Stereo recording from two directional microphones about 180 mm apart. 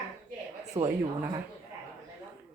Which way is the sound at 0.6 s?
35° right (ahead or behind).